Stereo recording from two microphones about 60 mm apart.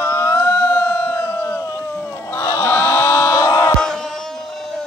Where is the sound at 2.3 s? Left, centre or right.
Left.